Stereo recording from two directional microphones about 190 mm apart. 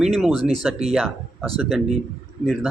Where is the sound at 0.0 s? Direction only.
Centre (ahead or behind).